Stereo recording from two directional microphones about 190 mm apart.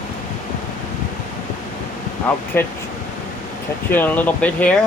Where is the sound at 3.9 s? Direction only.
10° left (ahead or behind).